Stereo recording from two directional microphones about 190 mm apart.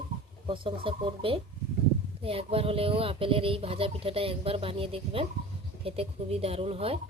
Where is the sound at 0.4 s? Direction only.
25° right (ahead or behind).